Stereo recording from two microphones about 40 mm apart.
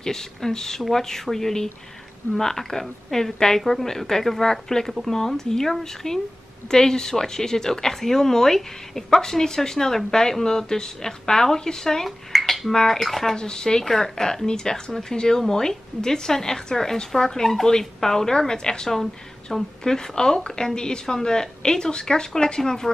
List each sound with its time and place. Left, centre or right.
0.0 s speech: centre
13.4 s speech: centre